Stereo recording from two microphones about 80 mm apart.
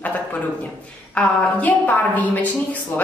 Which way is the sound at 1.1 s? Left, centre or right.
Centre.